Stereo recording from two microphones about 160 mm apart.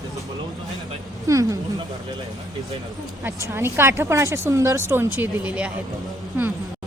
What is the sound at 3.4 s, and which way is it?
Speech, 15° right (ahead or behind).